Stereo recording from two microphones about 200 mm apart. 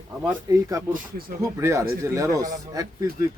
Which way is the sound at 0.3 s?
15° right (ahead or behind).